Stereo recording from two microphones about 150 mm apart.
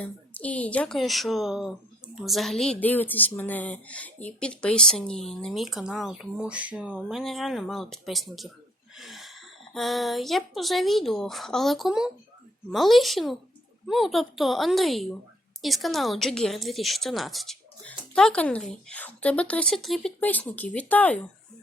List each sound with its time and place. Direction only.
0.0 s a woman's voice: 10° left (ahead or behind)